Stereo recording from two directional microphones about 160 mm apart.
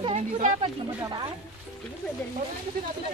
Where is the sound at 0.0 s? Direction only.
40° right (ahead or behind).